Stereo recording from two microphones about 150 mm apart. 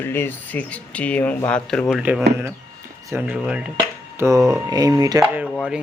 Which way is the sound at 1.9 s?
5° right (ahead or behind).